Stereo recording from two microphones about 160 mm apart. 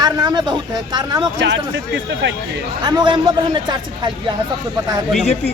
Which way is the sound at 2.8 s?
25° right (ahead or behind).